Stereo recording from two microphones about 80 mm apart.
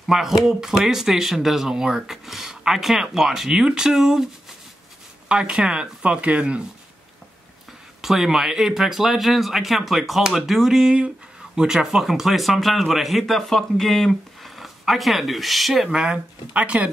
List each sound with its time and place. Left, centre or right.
0.0 s speech: centre
5.3 s speech: centre
8.0 s speech: centre